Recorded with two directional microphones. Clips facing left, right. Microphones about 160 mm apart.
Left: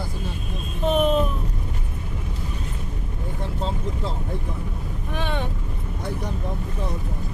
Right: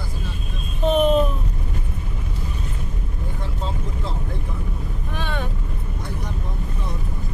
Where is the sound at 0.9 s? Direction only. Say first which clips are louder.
Right 3 dB; 5° left (ahead or behind).